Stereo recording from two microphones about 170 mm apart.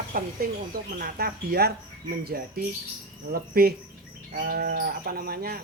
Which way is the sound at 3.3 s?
65° right (ahead or behind).